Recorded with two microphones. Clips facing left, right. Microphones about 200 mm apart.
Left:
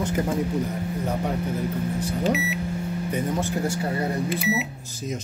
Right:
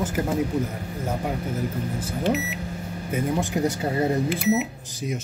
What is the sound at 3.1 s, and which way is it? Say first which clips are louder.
Speech: right 3 dB; 15° right (ahead or behind).